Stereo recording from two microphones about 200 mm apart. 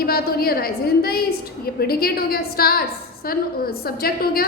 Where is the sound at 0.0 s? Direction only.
50° left (ahead or behind).